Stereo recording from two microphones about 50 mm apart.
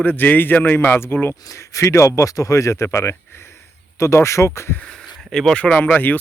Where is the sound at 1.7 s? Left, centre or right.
Left.